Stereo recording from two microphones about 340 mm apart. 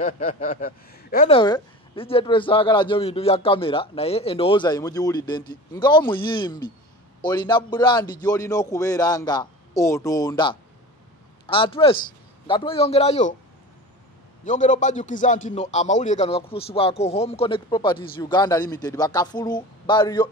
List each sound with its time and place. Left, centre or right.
0.0 s speech: left
14.4 s speech: left